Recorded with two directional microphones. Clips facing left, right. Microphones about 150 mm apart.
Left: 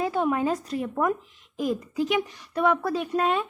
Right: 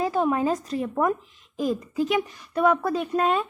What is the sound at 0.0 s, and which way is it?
A woman's voice, 35° right (ahead or behind).